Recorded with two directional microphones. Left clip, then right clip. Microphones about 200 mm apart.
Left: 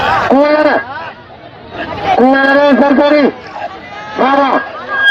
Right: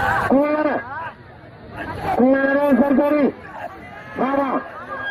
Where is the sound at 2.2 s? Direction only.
45° right (ahead or behind).